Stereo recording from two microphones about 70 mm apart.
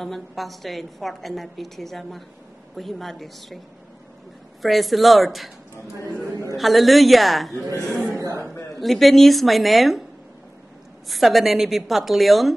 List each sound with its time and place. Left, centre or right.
0.0 s a woman's voice: centre
4.6 s a woman's voice: centre
6.5 s a woman's voice: centre
8.1 s chuckle: right
8.8 s a woman's voice: centre
11.1 s a woman's voice: centre